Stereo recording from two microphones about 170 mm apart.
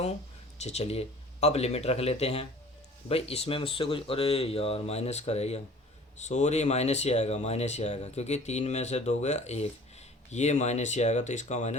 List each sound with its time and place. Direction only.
0.6 s speech: 40° left (ahead or behind)